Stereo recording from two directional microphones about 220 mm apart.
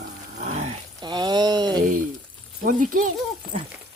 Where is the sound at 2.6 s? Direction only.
40° right (ahead or behind).